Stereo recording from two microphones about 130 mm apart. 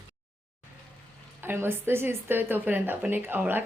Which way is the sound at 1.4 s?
15° right (ahead or behind).